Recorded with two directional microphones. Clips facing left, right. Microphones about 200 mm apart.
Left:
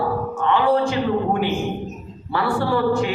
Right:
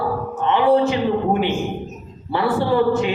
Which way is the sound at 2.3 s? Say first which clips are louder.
Right 2 dB; 20° right (ahead or behind).